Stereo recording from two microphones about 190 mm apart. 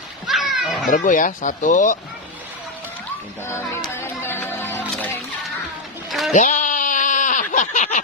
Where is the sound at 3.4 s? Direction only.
15° left (ahead or behind).